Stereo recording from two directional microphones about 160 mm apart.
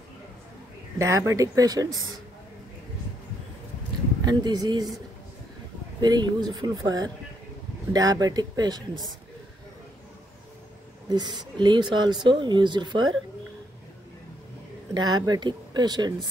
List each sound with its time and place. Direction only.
0.9 s speech: 20° right (ahead or behind)
4.2 s speech: 25° right (ahead or behind)
5.9 s speech: 25° right (ahead or behind)
11.1 s speech: 25° right (ahead or behind)
15.0 s speech: 25° right (ahead or behind)